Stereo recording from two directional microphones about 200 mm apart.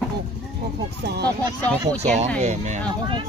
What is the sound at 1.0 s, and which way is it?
Speech, 55° right (ahead or behind).